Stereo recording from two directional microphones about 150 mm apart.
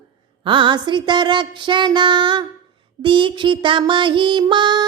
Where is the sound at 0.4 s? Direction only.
30° right (ahead or behind).